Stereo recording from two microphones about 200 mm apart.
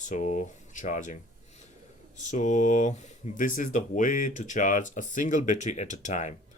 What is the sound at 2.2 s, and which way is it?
Speech, 35° left (ahead or behind).